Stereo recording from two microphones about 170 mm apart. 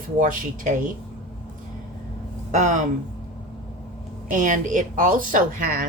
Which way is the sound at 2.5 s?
45° right (ahead or behind).